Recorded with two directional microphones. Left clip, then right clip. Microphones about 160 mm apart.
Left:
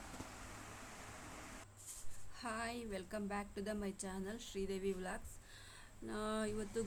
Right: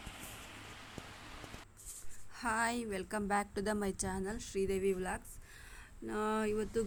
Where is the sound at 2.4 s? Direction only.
35° right (ahead or behind); by 6.8 s 20° right (ahead or behind).